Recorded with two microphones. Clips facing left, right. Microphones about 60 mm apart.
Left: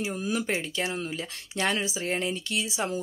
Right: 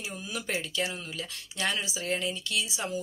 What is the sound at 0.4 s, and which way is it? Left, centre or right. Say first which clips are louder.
Speech: left 3 dB; left.